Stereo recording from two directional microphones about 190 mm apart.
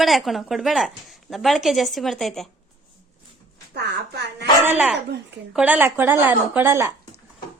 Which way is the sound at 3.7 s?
60° right (ahead or behind).